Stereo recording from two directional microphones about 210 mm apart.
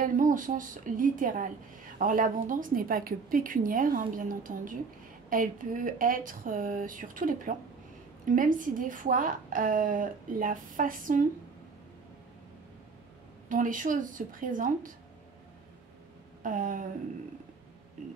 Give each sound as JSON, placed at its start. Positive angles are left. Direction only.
{"t": 0.0, "sound": "a woman's voice", "side_deg": -40}
{"t": 13.5, "sound": "a woman's voice", "side_deg": -40}
{"t": 16.4, "sound": "a woman's voice", "side_deg": -40}